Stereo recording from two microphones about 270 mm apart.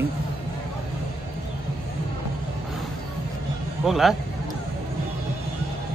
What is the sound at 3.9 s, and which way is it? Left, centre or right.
Speech, centre.